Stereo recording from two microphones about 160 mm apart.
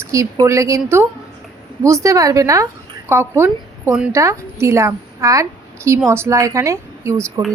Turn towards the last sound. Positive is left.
turn(degrees=-15)  # may be behind; listen again after turning